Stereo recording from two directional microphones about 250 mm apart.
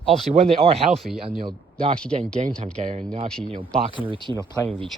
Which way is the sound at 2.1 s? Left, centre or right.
Right.